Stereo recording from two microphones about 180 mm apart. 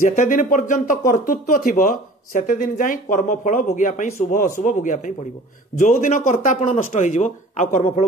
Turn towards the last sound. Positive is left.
turn(degrees=40)  # may be behind; listen again after turning